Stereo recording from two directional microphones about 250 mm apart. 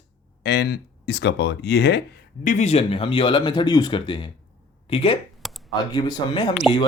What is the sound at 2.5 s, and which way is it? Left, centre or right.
Speech, left.